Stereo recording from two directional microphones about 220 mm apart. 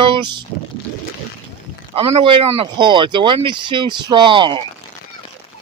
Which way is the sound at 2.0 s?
25° right (ahead or behind).